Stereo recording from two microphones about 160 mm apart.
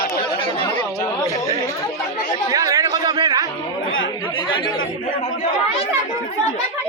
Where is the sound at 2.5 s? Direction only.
20° right (ahead or behind).